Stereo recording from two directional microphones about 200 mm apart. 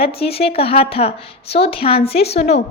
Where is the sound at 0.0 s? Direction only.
30° left (ahead or behind).